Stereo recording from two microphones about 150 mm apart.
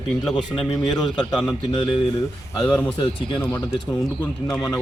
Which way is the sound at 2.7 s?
10° left (ahead or behind).